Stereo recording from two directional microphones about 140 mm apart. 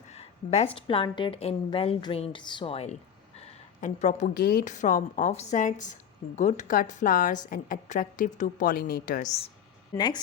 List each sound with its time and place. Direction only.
0.1 s a woman's voice: 50° left (ahead or behind)
1.4 s speech: 45° left (ahead or behind)
2.1 s a sound: 40° left (ahead or behind)
3.8 s a woman's voice: 65° left (ahead or behind)
5.3 s a woman's voice: 55° left (ahead or behind); by 9.2 s 85° left